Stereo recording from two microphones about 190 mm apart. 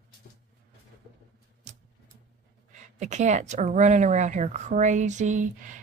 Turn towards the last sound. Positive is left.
turn(degrees=-40)  # may be behind; listen again after turning